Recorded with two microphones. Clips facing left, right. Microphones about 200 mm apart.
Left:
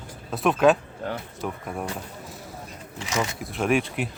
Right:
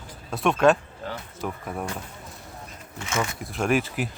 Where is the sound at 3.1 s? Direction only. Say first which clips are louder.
Left 1 dB; 20° left (ahead or behind).